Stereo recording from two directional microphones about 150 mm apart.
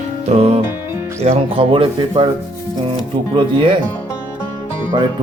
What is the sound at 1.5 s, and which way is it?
Speech, 35° right (ahead or behind).